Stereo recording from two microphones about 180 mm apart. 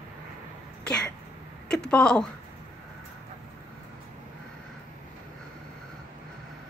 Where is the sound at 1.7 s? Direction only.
5° left (ahead or behind).